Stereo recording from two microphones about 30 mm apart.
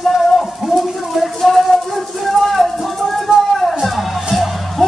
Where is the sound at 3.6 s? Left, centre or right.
Centre.